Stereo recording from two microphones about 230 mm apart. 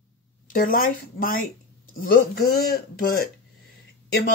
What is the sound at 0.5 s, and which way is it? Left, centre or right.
Speech, left.